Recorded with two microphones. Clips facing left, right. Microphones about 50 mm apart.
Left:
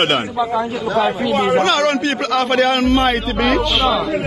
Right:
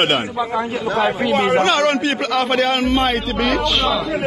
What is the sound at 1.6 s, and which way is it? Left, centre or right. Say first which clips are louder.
Speech: even; right.